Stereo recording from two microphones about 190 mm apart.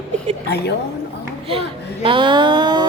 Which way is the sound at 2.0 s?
25° right (ahead or behind).